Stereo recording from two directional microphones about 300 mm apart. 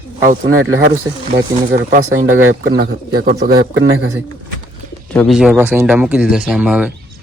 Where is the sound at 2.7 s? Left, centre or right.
Right.